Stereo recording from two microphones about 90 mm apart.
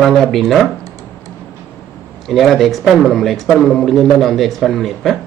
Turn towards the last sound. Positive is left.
turn(degrees=0)  # may be behind; listen again after turning